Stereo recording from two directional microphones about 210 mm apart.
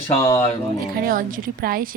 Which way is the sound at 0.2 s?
15° left (ahead or behind).